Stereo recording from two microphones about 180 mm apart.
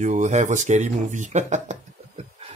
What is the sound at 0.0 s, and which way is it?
A man's voice, 40° right (ahead or behind).